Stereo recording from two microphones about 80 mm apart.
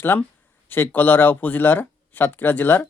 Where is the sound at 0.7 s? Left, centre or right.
Left.